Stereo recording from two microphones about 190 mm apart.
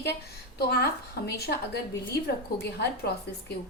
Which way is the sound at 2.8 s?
60° left (ahead or behind).